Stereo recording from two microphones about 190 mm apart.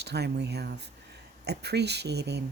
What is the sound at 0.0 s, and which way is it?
Speech, 60° right (ahead or behind).